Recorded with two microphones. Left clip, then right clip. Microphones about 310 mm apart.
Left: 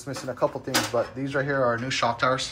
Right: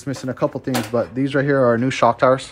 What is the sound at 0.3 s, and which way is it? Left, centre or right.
Speech, right.